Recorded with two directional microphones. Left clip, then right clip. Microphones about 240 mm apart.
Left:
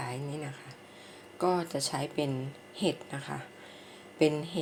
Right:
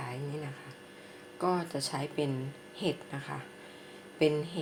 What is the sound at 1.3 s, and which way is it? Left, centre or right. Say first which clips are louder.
Speech: left 2 dB; centre.